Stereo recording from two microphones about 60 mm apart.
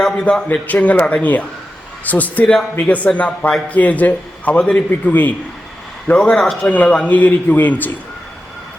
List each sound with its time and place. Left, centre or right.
0.3 s a man's voice: left
6.1 s speech: centre
6.7 s a man's voice: left